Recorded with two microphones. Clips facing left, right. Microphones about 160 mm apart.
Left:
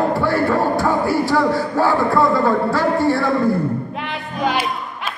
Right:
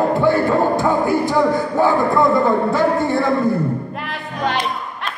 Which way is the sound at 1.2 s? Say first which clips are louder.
Right 1 dB; 20° right (ahead or behind).